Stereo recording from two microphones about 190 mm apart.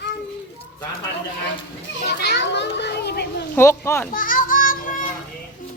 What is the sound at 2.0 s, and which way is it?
Children playing, 65° left (ahead or behind).